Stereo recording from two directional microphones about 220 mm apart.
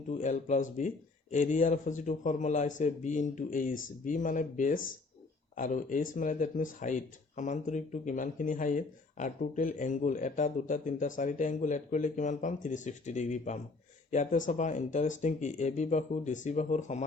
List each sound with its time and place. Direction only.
0.1 s speech: 35° left (ahead or behind)